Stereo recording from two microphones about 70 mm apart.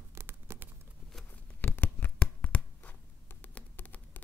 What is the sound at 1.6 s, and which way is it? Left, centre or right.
Shuffling cards, left.